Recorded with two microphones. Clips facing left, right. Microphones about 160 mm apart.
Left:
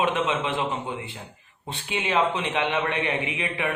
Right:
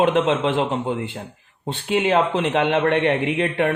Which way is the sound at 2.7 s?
55° right (ahead or behind).